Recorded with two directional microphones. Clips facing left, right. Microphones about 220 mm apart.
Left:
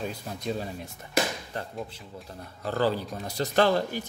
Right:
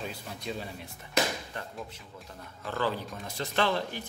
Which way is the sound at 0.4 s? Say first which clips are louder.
Left 6 dB; 40° left (ahead or behind).